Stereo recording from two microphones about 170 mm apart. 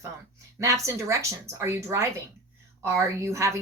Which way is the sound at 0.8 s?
15° right (ahead or behind).